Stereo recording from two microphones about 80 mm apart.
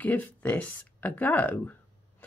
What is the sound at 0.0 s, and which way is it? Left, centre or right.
Speech, centre.